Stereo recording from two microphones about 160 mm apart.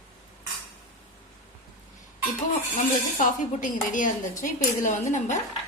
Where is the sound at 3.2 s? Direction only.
55° left (ahead or behind).